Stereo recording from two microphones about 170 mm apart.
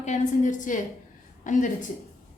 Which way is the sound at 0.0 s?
45° left (ahead or behind).